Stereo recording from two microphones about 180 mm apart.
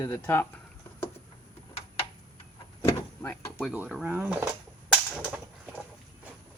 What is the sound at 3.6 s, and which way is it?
Speech, centre (ahead or behind).